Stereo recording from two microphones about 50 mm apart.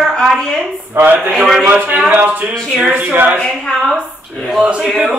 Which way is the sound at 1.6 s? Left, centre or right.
Right.